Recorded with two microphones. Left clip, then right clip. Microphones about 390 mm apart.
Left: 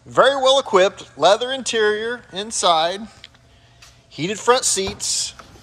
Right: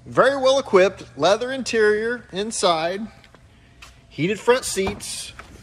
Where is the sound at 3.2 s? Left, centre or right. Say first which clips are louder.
Left 6 dB; left.